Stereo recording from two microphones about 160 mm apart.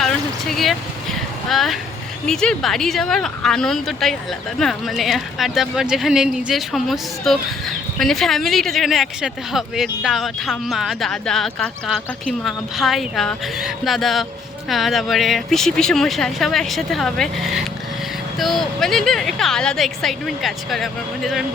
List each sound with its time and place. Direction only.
0.0 s vehicle: centre (ahead or behind)
2.2 s speech: 5° left (ahead or behind)